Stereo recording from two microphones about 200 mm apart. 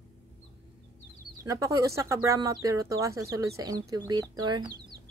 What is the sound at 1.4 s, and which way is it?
Speech, 15° right (ahead or behind).